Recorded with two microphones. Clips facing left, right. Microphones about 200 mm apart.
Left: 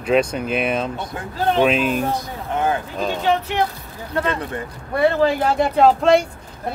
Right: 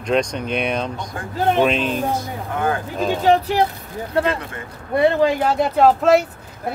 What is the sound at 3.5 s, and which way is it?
Speech, 35° right (ahead or behind).